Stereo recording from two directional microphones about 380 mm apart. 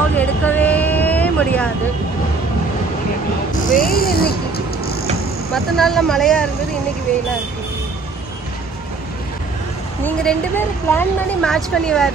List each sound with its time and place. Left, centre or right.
0.1 s vehicle: centre
3.7 s a sound: left
5.5 s speech: centre
10.9 s speech: centre